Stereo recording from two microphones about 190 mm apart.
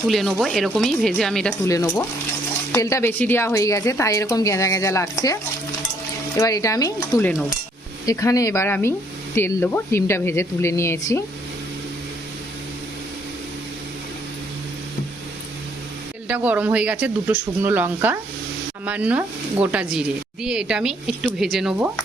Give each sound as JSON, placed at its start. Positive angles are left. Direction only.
{"t": 0.1, "sound": "speech", "side_deg": 0}
{"t": 1.6, "sound": "speech", "side_deg": 15}
{"t": 16.3, "sound": "speech", "side_deg": -10}